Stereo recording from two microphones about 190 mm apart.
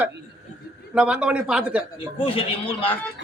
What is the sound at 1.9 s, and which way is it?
A man's voice, 30° left (ahead or behind).